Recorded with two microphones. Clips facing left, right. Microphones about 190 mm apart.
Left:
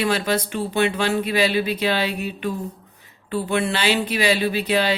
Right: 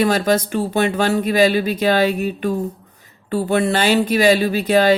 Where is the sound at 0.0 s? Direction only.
45° right (ahead or behind).